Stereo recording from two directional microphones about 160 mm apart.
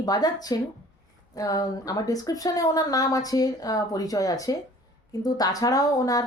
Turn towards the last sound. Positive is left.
turn(degrees=25)  # may be behind; listen again after turning